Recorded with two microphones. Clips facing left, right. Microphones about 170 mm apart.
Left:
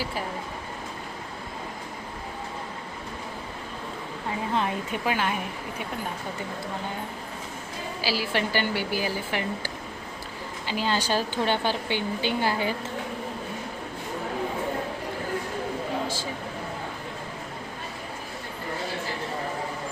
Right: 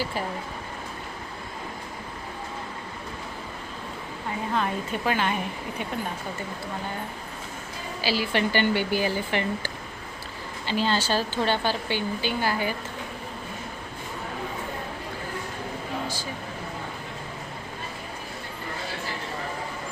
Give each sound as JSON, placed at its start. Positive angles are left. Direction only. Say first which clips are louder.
{"t": 4.5, "sound": "speech", "louder": "right 1 dB", "side_deg": 15}
{"t": 8.0, "sound": "speech", "louder": "right 2 dB", "side_deg": 5}